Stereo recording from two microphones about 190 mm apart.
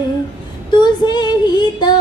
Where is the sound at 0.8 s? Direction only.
20° left (ahead or behind).